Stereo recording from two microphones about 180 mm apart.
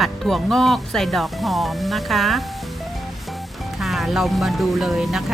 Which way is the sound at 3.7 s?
Centre (ahead or behind).